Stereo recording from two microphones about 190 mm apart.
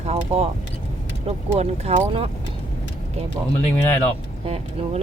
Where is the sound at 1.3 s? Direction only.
35° right (ahead or behind).